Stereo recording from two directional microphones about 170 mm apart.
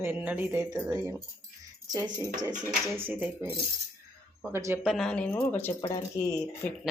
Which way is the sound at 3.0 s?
10° right (ahead or behind).